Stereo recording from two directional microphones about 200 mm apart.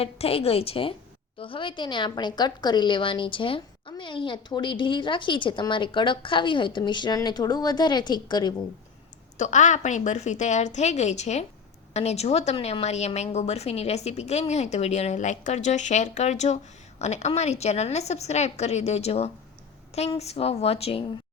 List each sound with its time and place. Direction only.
0.0 s a woman's voice: 30° left (ahead or behind)
9.4 s a woman's voice: 35° left (ahead or behind)